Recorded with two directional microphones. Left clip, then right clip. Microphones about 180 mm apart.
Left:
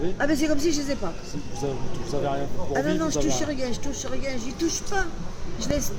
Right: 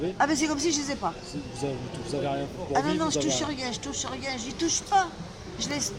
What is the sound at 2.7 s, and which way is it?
Speech, 15° right (ahead or behind).